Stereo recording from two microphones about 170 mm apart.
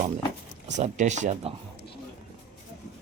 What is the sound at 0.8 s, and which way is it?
Speech, 45° right (ahead or behind).